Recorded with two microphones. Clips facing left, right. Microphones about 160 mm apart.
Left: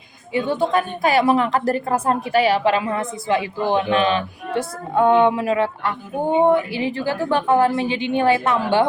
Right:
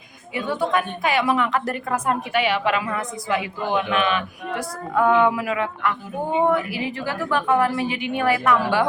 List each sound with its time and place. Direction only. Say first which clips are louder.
0.3 s a woman's voice: left 3 dB; 30° left (ahead or behind)